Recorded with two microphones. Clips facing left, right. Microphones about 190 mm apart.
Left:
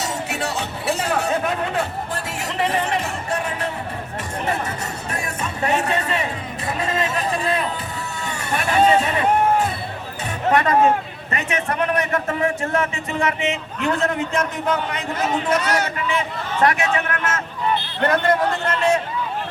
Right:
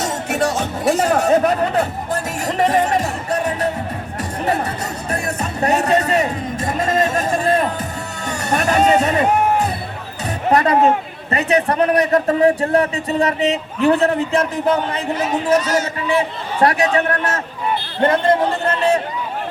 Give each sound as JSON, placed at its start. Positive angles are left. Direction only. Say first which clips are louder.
{"t": 0.0, "sound": "music", "louder": "right 6 dB", "side_deg": -45}
{"t": 5.1, "sound": "music", "louder": "right 6 dB", "side_deg": -40}
{"t": 10.5, "sound": "a man's voice", "louder": "right 2 dB", "side_deg": -35}
{"t": 16.0, "sound": "a man's voice", "louder": "right 5 dB", "side_deg": -35}